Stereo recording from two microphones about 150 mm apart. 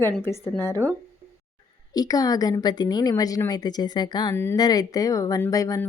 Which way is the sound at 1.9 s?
25° left (ahead or behind).